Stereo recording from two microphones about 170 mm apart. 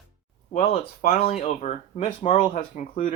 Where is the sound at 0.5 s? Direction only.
40° left (ahead or behind).